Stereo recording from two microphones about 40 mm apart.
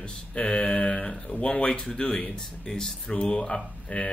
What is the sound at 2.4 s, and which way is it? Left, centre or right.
Speech, centre.